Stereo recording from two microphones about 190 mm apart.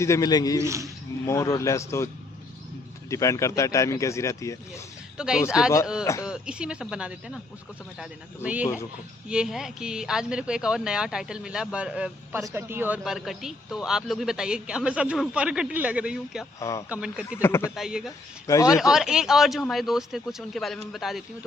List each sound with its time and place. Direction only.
0.0 s a man's voice: 15° left (ahead or behind)
0.6 s speech: 15° right (ahead or behind)
1.2 s speech: 15° left (ahead or behind)
3.1 s speech: 15° left (ahead or behind)
5.1 s speech: 5° right (ahead or behind)
9.3 s speech: 5° right (ahead or behind)
16.6 s speech: 15° left (ahead or behind)
16.9 s speech: 5° right (ahead or behind)
17.4 s speech: 15° left (ahead or behind)
17.7 s speech: centre (ahead or behind)
18.4 s speech: 15° left (ahead or behind)
18.8 s speech: 5° right (ahead or behind)